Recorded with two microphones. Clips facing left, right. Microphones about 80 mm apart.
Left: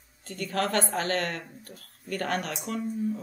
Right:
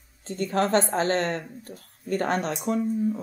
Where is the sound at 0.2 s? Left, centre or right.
Right.